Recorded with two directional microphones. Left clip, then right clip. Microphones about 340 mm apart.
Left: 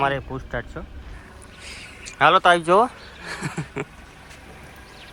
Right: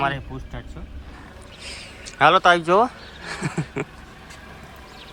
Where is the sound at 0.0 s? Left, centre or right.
Centre.